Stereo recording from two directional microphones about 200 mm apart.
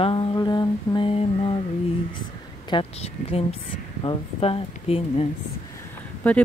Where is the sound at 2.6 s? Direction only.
25° left (ahead or behind).